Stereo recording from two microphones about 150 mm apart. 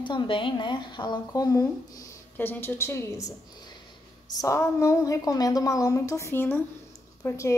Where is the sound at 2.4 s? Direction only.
15° left (ahead or behind).